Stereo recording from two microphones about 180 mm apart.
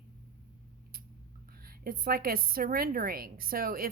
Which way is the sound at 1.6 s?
55° right (ahead or behind).